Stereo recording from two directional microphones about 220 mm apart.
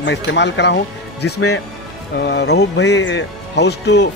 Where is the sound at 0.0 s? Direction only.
55° left (ahead or behind).